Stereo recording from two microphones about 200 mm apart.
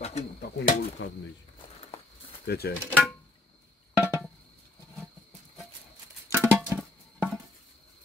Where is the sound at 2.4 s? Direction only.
55° left (ahead or behind).